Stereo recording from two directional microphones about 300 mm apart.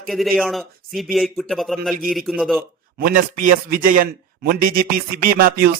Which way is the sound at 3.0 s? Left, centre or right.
Right.